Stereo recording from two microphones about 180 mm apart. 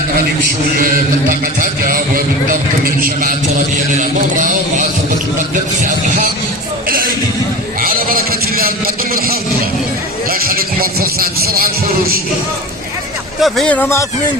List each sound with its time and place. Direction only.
1.8 s a man's voice: 50° right (ahead or behind)
6.8 s a sound: 55° right (ahead or behind)
13.4 s speech: 5° left (ahead or behind)